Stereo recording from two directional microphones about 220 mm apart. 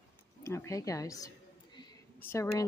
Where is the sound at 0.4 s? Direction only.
10° left (ahead or behind).